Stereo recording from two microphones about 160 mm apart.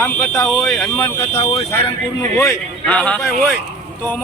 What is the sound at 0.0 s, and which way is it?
Speech, 20° left (ahead or behind).